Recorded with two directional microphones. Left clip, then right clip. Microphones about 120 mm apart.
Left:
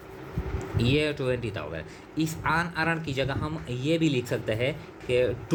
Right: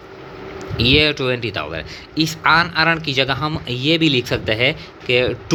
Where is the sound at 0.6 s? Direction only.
45° right (ahead or behind).